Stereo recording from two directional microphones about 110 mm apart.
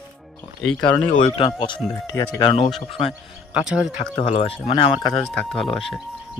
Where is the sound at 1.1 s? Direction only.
90° left.